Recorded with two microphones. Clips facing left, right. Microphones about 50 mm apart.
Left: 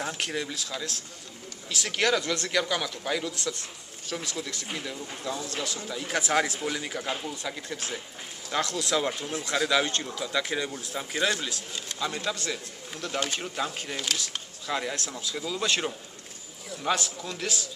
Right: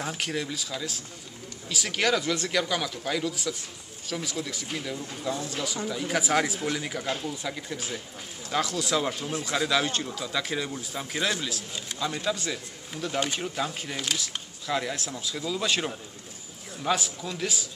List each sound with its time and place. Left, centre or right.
0.0 s speech: centre